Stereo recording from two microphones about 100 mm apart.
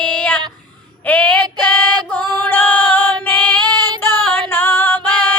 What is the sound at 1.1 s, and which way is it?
Female singing, 15° left (ahead or behind).